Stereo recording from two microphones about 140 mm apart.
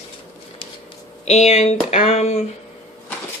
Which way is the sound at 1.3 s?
55° left (ahead or behind).